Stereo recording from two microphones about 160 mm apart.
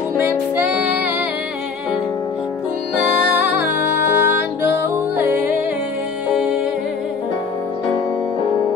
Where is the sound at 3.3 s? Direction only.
10° right (ahead or behind).